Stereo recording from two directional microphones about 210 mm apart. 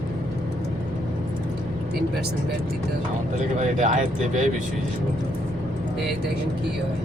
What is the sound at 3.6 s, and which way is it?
Speech, 35° right (ahead or behind).